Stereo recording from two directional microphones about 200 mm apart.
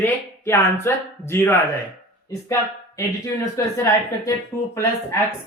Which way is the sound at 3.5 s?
15° left (ahead or behind).